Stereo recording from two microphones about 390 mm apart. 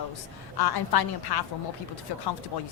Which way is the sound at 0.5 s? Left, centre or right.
Left.